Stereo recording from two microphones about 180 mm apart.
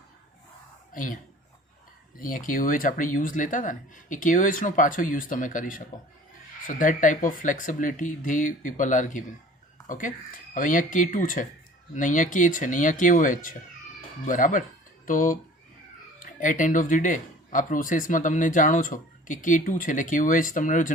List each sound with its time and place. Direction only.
0.9 s speech: 45° left (ahead or behind)